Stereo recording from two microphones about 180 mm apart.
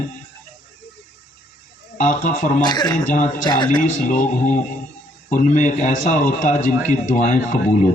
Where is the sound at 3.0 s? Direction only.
45° left (ahead or behind).